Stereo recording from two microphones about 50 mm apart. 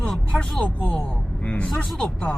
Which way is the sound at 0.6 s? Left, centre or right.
Left.